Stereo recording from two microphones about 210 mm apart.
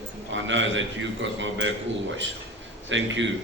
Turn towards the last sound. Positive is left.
turn(degrees=-60)  # may be behind; listen again after turning